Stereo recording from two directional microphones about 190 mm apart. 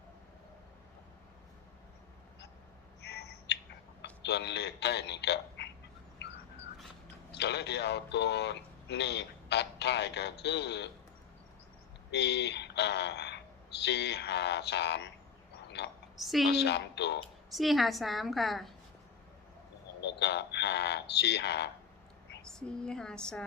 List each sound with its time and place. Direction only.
3.1 s a sound: 60° left (ahead or behind)
4.0 s speech: 60° left (ahead or behind)
7.3 s a man's voice: 65° left (ahead or behind)
12.1 s speech: 65° left (ahead or behind)
15.6 s a sound: 65° left (ahead or behind)
16.2 s a woman's voice: centre (ahead or behind)
16.5 s speech: 60° left (ahead or behind)
17.5 s a woman's voice: centre (ahead or behind)
20.0 s speech: 65° left (ahead or behind)
22.6 s a woman's voice: 5° left (ahead or behind)